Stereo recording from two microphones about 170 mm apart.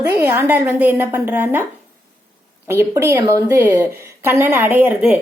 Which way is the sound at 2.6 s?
15° right (ahead or behind).